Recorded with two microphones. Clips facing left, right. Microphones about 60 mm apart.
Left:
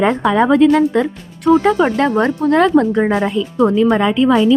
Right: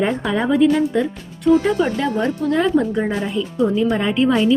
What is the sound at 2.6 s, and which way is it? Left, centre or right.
A woman's voice, left.